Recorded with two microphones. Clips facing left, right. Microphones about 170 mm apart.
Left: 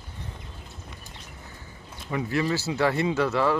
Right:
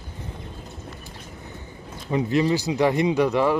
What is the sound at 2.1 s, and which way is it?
Speech, 20° right (ahead or behind).